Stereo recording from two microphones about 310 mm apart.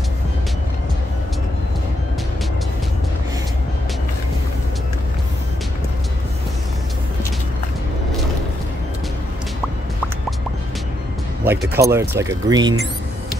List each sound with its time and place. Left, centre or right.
11.4 s speech: centre